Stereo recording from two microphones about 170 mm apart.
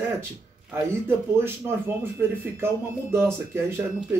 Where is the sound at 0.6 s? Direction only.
10° right (ahead or behind).